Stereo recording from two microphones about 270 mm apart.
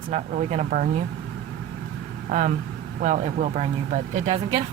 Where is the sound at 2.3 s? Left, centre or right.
Right.